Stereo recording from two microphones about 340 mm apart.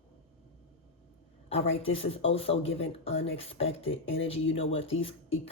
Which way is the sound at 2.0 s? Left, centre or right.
Centre.